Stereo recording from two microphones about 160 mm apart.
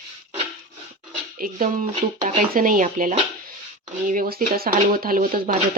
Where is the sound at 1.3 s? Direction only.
60° right (ahead or behind).